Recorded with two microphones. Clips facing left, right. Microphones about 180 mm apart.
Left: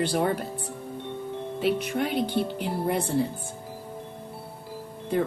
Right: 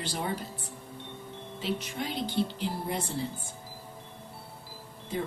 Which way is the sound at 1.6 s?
60° left (ahead or behind).